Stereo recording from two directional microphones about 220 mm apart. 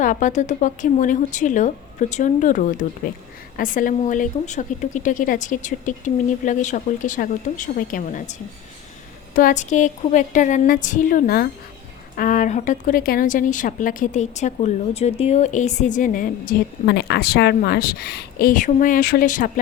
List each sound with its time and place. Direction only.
0.0 s a woman's voice: 35° left (ahead or behind)